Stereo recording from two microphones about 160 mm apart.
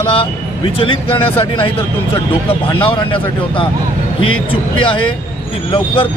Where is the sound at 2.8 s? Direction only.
30° left (ahead or behind).